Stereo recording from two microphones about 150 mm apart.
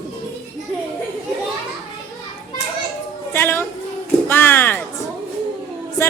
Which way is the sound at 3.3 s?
15° left (ahead or behind).